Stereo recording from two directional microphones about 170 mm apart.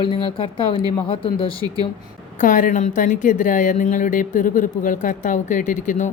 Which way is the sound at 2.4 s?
50° left (ahead or behind).